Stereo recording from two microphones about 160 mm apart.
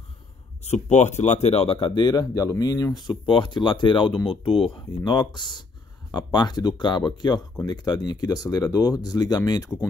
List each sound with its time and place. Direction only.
0.8 s speech: 45° left (ahead or behind); by 9.7 s 25° left (ahead or behind)